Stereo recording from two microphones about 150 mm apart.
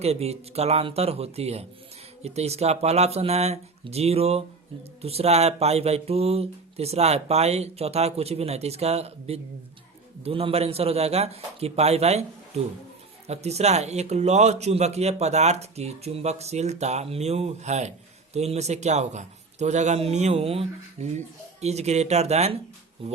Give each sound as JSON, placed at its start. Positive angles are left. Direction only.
{"t": 0.0, "sound": "speech", "side_deg": -45}